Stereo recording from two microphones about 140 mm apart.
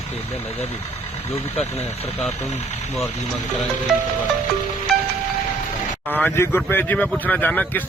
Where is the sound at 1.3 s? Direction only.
45° left (ahead or behind).